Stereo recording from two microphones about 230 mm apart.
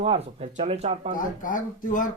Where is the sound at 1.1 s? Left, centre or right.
Left.